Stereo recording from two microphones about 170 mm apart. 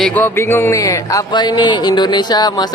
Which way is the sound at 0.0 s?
10° left (ahead or behind).